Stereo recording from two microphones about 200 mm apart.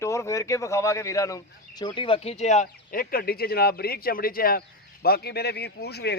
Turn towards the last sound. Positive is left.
turn(degrees=55)  # may be behind; listen again after turning